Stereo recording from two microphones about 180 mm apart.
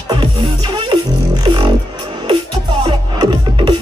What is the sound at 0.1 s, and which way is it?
Music, 25° right (ahead or behind).